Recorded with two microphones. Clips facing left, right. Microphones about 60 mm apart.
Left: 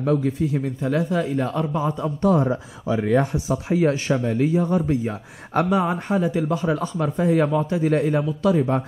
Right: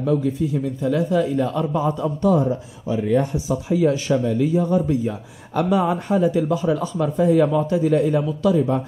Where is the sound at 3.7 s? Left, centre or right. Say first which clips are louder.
Right 2 dB; left; by 6.5 s centre.